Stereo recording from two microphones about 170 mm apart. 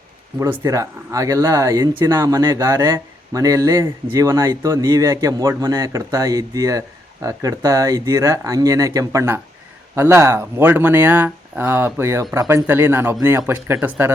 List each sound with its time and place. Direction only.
0.3 s speech: 15° right (ahead or behind)